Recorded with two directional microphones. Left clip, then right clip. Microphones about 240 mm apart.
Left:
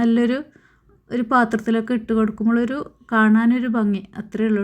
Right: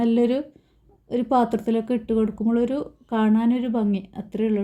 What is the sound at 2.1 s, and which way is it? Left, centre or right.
Speech, left.